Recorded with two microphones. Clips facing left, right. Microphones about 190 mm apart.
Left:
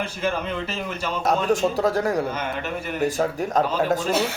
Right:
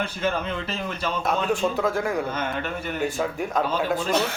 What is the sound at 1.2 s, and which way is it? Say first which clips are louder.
Speech: left 4 dB; 40° left (ahead or behind).